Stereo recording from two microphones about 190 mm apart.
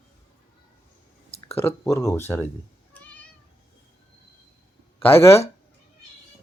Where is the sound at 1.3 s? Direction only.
30° left (ahead or behind).